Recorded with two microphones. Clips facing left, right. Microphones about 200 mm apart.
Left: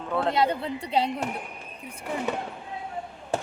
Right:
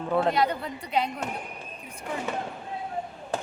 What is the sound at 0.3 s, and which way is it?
Speech, 25° left (ahead or behind).